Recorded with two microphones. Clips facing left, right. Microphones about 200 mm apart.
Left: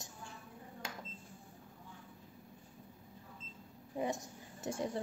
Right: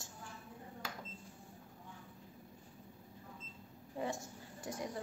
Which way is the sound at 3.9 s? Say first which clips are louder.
Left 3 dB; 20° left (ahead or behind).